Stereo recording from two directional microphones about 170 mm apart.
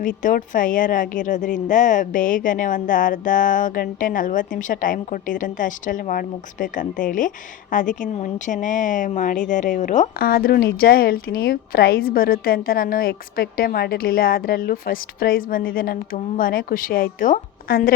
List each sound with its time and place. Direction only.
0.2 s a woman's voice: 50° left (ahead or behind)
10.2 s a woman's voice: 60° left (ahead or behind)